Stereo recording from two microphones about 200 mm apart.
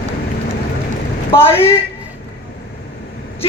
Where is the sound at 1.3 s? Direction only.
10° left (ahead or behind).